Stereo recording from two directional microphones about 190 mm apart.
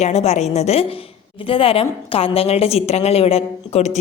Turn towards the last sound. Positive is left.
turn(degrees=35)  # may be behind; listen again after turning